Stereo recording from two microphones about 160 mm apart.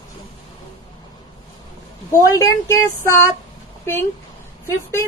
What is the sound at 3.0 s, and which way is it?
A woman's voice, 15° left (ahead or behind).